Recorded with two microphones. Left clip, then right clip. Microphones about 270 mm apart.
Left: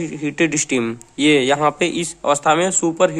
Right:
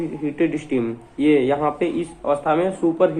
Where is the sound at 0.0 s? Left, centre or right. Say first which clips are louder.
Left 2 dB; left.